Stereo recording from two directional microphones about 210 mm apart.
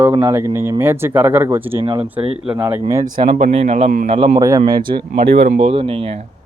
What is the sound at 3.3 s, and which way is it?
A man's voice, 30° right (ahead or behind).